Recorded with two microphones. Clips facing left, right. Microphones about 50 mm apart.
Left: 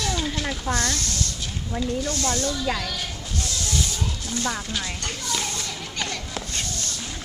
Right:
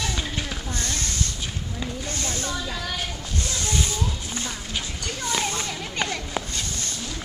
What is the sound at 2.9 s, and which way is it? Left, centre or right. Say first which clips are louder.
Music: right 1 dB; right.